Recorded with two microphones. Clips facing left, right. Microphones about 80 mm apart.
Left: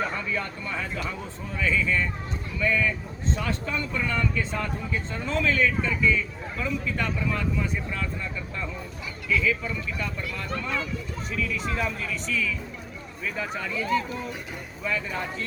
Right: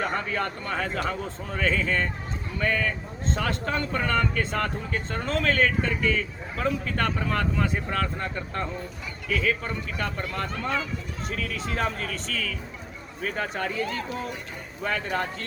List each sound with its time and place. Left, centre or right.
0.0 s speech: right
14.8 s speech: right